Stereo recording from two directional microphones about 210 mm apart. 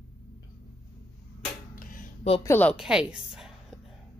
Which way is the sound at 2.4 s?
10° left (ahead or behind).